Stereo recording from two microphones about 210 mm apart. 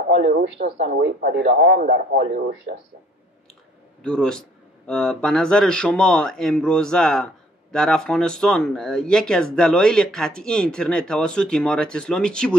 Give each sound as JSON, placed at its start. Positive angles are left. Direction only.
{"t": 0.1, "sound": "speech", "side_deg": -50}
{"t": 4.0, "sound": "speech", "side_deg": 5}